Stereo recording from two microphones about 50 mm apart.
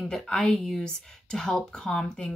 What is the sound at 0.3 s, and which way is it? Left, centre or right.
Speech, left.